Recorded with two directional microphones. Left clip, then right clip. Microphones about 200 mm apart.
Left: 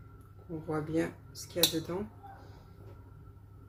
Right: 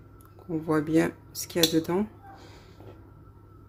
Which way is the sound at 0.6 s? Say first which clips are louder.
Right 9 dB; 55° right (ahead or behind).